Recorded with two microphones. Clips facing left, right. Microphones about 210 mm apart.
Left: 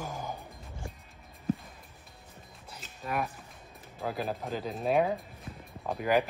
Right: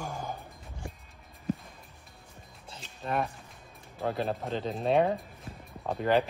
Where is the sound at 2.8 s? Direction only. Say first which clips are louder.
Right 2 dB; 5° left (ahead or behind).